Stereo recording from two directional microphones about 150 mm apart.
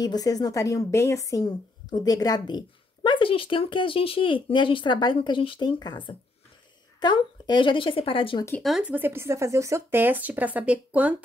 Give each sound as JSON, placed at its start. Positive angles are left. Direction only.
{"t": 0.0, "sound": "a woman's voice", "side_deg": 25}
{"t": 8.6, "sound": "speech", "side_deg": -5}